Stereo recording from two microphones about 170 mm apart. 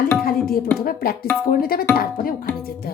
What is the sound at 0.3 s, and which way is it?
Music, 60° left (ahead or behind).